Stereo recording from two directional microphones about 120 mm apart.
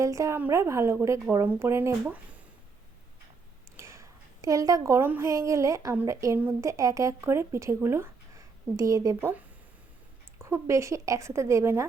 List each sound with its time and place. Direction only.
0.0 s speech: 25° right (ahead or behind)
3.8 s a sound: 25° right (ahead or behind)
5.3 s speech: 25° right (ahead or behind)
10.3 s speech: 20° right (ahead or behind)